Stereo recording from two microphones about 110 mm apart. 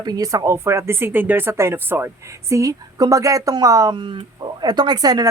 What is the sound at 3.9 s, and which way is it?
A woman's voice, 50° right (ahead or behind).